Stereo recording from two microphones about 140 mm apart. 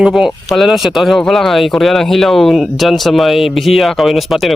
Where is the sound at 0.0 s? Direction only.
5° right (ahead or behind).